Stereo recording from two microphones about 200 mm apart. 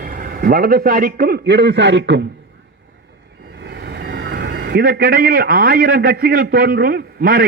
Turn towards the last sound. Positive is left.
turn(degrees=-50)  # may be behind; listen again after turning